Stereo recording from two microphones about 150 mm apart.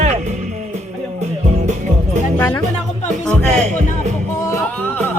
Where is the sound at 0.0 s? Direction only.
50° right (ahead or behind).